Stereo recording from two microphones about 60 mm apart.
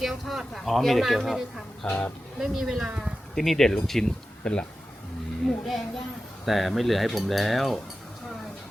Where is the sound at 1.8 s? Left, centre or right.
Centre.